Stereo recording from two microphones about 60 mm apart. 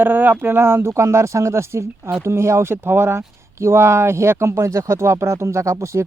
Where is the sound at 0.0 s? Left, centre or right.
Right.